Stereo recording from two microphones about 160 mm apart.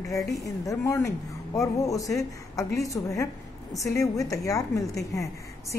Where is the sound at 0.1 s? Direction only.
20° left (ahead or behind).